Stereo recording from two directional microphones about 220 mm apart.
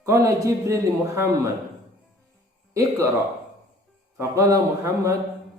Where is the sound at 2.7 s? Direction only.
15° right (ahead or behind).